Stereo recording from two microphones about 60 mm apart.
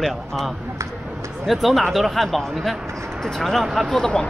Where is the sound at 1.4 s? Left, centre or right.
Centre.